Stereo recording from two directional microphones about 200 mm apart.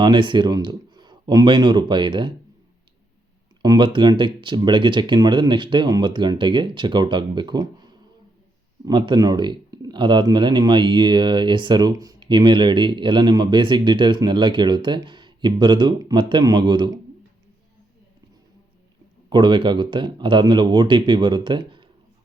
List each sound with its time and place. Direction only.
0.0 s speech: 25° right (ahead or behind)
3.6 s speech: 20° right (ahead or behind)
19.3 s speech: 25° right (ahead or behind)